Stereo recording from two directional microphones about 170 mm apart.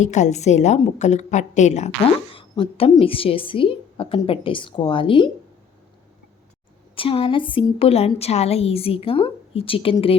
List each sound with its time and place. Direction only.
0.0 s a woman's voice: 45° left (ahead or behind)
2.3 s a sound: 30° left (ahead or behind)
2.9 s a woman's voice: 35° left (ahead or behind)
6.9 s a woman's voice: 30° left (ahead or behind)